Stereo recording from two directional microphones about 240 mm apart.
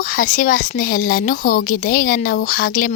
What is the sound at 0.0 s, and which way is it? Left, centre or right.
Speech, left.